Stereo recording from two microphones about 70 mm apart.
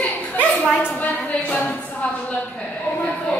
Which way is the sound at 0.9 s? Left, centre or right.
Left.